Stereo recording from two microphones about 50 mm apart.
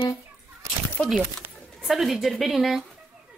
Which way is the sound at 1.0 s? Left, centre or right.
Left.